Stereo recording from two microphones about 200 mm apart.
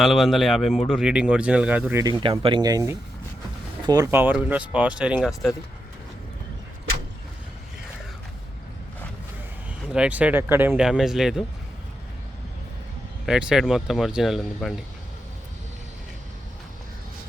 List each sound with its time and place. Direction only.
0.0 s speech: centre (ahead or behind)
2.2 s speech: 25° right (ahead or behind); by 5.1 s 5° right (ahead or behind)
9.6 s speech: 5° right (ahead or behind)
13.2 s speech: 5° right (ahead or behind)